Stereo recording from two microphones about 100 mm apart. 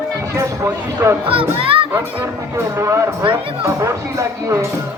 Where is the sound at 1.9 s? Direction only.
25° right (ahead or behind).